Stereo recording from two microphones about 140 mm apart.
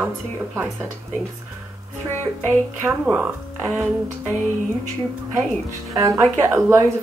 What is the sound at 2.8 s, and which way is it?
Speech, 10° right (ahead or behind).